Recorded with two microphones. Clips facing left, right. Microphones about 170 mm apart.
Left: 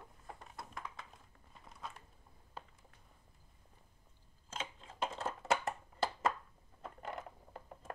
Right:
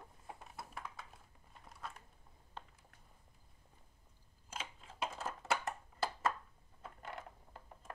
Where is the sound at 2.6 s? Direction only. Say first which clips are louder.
Left 1 dB; 5° left (ahead or behind).